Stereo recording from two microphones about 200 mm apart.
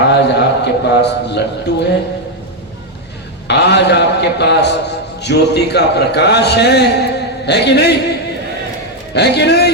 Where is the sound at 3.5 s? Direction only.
60° left (ahead or behind).